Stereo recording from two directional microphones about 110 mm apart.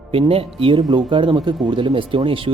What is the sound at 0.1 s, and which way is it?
Speech, 60° right (ahead or behind).